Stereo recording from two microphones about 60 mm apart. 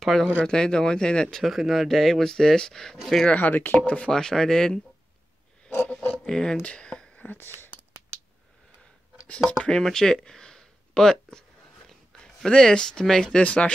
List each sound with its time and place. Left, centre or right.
0.0 s speech: centre
1.4 s speech: centre
3.3 s speech: left; by 4.7 s centre
6.2 s speech: centre
6.6 s a sound: centre
7.2 s a sound: left
9.3 s speech: centre
9.8 s a sound: centre
12.2 s speech: centre